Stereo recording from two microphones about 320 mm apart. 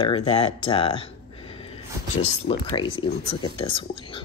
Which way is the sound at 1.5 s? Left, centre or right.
Centre.